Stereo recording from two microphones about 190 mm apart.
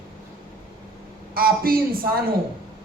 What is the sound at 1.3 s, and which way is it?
Speech, 50° right (ahead or behind).